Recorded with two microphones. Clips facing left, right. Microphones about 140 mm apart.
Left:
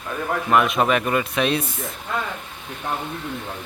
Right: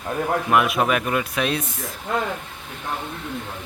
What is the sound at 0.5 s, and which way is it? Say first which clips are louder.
A man's voice: left 2 dB; 5° right (ahead or behind).